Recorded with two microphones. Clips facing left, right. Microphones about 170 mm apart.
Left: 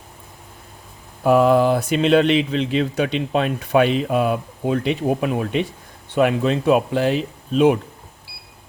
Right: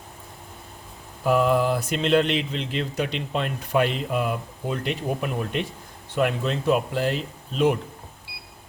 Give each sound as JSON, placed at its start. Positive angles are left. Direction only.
{"t": 1.2, "sound": "speech", "side_deg": 70}
{"t": 6.1, "sound": "speech", "side_deg": 65}